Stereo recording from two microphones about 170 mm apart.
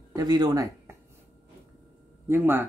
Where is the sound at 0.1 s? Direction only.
25° right (ahead or behind).